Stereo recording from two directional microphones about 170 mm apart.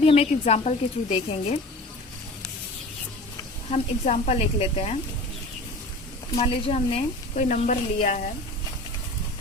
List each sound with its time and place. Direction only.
0.0 s a woman's voice: 35° left (ahead or behind)
3.7 s a woman's voice: 45° left (ahead or behind)
6.3 s a woman's voice: 35° left (ahead or behind)
7.3 s speech: 50° left (ahead or behind)